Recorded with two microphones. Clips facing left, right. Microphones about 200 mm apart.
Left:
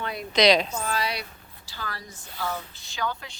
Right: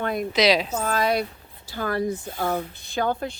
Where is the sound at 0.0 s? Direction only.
50° right (ahead or behind).